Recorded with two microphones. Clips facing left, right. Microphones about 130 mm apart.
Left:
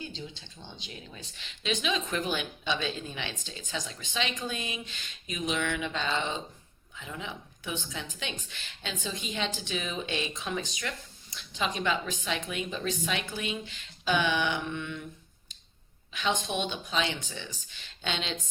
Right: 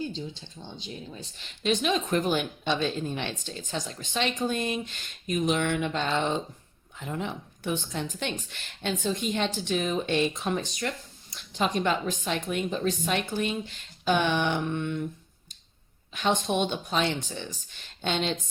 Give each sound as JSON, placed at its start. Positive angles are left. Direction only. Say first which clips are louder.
{"t": 0.8, "sound": "speech", "louder": "right 7 dB", "side_deg": -40}
{"t": 16.1, "sound": "speech", "louder": "right 4 dB", "side_deg": -45}